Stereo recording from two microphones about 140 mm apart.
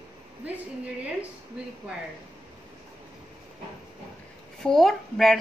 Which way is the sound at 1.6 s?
5° right (ahead or behind).